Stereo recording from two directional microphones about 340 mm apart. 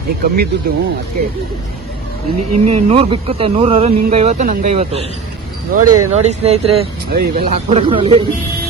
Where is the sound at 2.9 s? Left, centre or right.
Centre.